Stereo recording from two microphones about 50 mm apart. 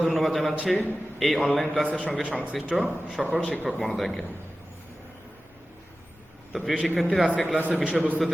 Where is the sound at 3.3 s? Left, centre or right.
Centre.